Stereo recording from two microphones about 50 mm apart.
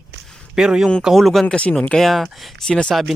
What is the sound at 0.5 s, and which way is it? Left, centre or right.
Speech, centre.